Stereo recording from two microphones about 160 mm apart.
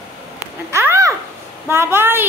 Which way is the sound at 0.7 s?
15° right (ahead or behind).